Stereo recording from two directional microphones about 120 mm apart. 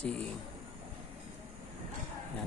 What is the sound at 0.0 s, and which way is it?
Speech, 10° left (ahead or behind).